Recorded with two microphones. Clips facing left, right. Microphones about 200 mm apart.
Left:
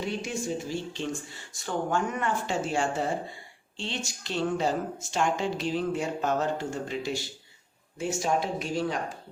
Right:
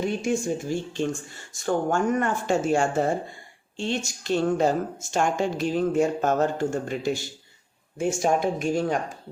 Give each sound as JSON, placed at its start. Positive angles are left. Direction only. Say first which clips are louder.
{"t": 0.0, "sound": "speech", "louder": "right 6 dB", "side_deg": -50}